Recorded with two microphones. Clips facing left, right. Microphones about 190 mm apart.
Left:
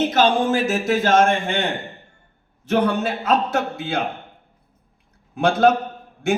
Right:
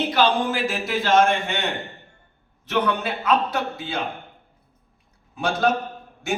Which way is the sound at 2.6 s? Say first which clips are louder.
Left 4 dB; 45° left (ahead or behind).